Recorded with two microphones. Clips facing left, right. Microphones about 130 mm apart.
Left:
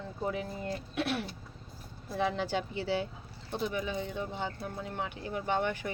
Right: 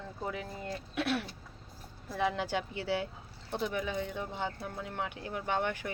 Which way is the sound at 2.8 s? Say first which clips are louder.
Left 1 dB; 25° left (ahead or behind).